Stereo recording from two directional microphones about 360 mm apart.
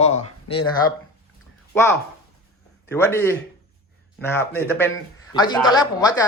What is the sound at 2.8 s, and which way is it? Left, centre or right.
Speech, centre.